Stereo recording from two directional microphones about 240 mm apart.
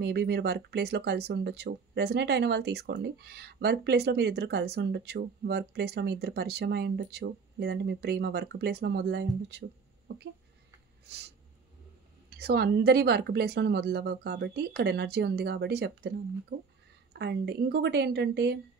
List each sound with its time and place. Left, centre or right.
0.0 s speech: right
12.3 s a woman's voice: right